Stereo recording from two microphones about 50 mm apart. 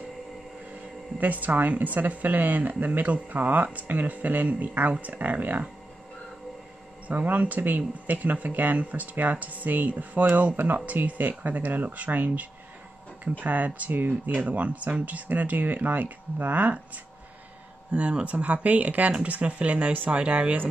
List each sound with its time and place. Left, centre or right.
1.2 s speech: right
7.1 s speech: right